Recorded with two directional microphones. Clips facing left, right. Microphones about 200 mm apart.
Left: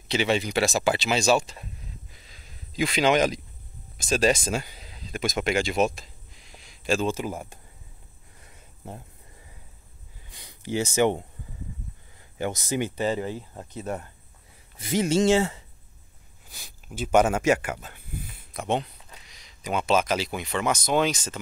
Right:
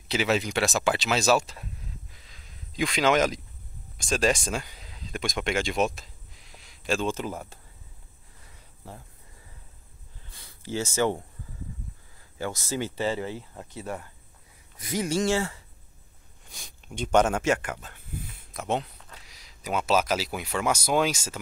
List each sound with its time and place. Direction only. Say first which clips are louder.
0.1 s speech: left 1 dB; centre (ahead or behind)
2.1 s a sound: left 1 dB; 5° left (ahead or behind)
4.0 s speech: left 2 dB; centre (ahead or behind)
8.8 s speech: left 4 dB; 20° left (ahead or behind)
10.3 s speech: left 3 dB; 20° left (ahead or behind)
12.4 s speech: left 3 dB; 20° left (ahead or behind)
16.4 s speech: even; 5° left (ahead or behind)